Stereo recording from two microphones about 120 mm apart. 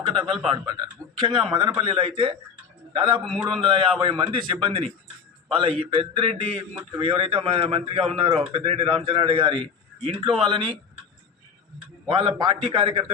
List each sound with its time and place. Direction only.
0.0 s a man's voice: 45° right (ahead or behind)
0.5 s a man's voice: 35° right (ahead or behind)
12.0 s a man's voice: 45° right (ahead or behind)